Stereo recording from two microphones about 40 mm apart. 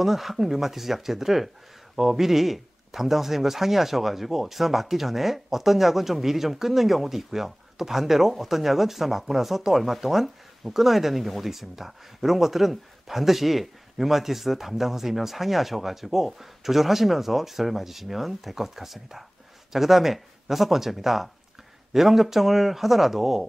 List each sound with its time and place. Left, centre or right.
0.0 s speech: centre